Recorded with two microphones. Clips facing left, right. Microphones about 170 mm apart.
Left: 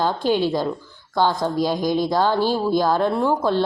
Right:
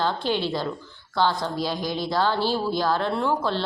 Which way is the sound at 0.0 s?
45° left (ahead or behind).